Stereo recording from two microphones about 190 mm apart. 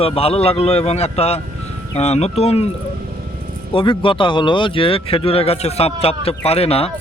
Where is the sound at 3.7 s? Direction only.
25° left (ahead or behind).